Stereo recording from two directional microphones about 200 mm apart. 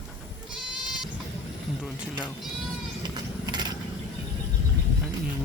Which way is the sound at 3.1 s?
20° right (ahead or behind).